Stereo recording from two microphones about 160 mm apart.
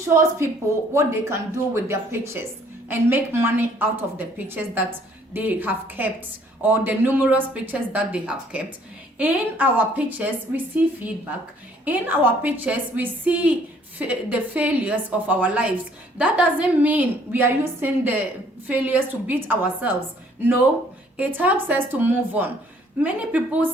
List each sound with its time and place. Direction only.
0.1 s speech: 15° right (ahead or behind)
11.9 s speech: 10° right (ahead or behind)
21.2 s speech: 10° right (ahead or behind)